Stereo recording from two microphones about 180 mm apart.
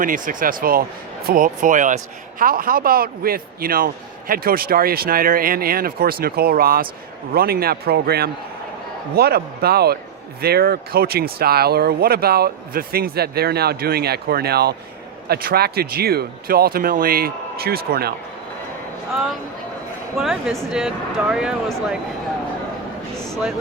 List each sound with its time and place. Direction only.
0.0 s speech: 50° right (ahead or behind)
19.1 s speech: centre (ahead or behind)